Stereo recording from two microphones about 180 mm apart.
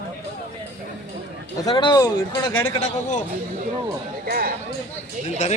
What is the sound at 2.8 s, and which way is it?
Speech, 40° left (ahead or behind).